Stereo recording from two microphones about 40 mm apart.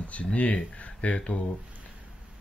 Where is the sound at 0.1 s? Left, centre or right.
Left.